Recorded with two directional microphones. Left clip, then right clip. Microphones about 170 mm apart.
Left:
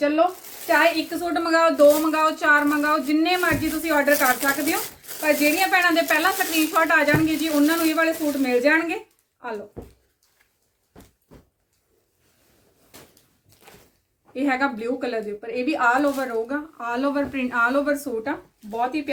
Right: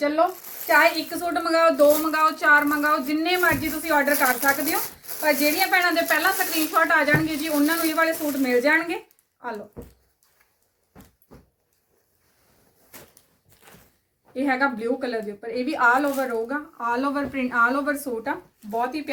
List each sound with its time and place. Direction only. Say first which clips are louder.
0.0 s a woman's voice: left 1 dB; 10° left (ahead or behind)
13.5 s door: left 1 dB; 30° left (ahead or behind)
14.3 s a woman's voice: even; 15° left (ahead or behind)